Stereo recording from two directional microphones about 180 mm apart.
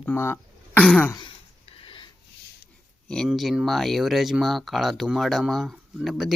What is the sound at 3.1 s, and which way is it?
Speech, centre (ahead or behind).